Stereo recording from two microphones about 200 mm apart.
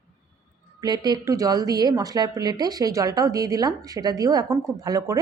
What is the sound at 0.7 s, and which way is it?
A woman's voice, 20° right (ahead or behind).